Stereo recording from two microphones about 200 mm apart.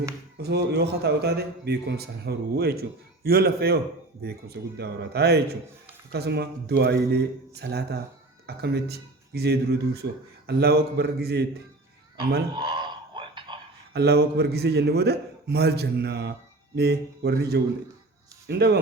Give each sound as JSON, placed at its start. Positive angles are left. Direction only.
{"t": 0.3, "sound": "a man's voice", "side_deg": -55}
{"t": 12.5, "sound": "a sound", "side_deg": -25}
{"t": 13.9, "sound": "a man's voice", "side_deg": -55}